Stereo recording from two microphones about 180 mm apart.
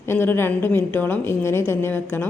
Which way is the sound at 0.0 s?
10° left (ahead or behind).